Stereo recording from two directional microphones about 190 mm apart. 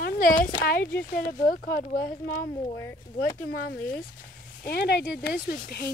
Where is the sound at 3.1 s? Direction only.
50° left (ahead or behind).